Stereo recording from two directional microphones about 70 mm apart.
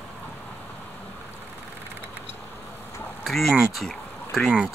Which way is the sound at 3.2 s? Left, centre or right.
Centre.